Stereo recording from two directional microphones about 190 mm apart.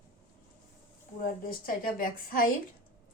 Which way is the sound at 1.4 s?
50° left (ahead or behind).